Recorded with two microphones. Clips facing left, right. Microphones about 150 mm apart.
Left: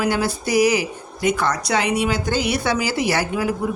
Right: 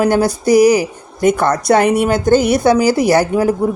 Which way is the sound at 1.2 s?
50° right (ahead or behind).